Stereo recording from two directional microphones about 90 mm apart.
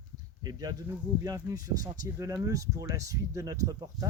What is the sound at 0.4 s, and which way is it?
Speech, 45° right (ahead or behind).